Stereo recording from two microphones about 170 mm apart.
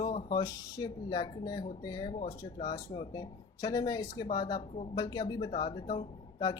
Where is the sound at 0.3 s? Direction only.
25° left (ahead or behind).